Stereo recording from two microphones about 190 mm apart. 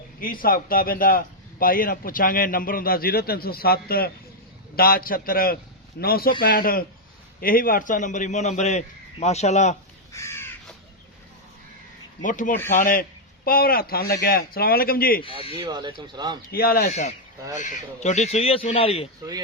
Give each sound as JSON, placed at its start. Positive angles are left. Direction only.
{"t": 0.2, "sound": "a man's voice", "side_deg": 50}
{"t": 10.1, "sound": "crow", "side_deg": 15}
{"t": 12.2, "sound": "a man's voice", "side_deg": 45}
{"t": 15.3, "sound": "speech", "side_deg": -25}
{"t": 16.5, "sound": "speech", "side_deg": 55}
{"t": 16.9, "sound": "speech", "side_deg": 35}